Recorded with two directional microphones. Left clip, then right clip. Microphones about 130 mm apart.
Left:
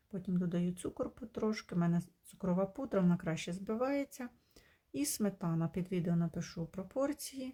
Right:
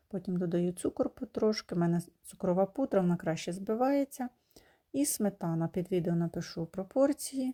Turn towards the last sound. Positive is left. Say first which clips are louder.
# right 8 dB
turn(degrees=-30)  # may be behind; listen again after turning